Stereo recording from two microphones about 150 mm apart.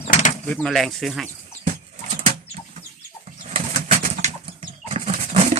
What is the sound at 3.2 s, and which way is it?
Pigeon, 50° right (ahead or behind).